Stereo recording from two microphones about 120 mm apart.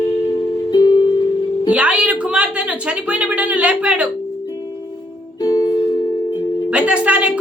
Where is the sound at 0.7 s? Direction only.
35° left (ahead or behind).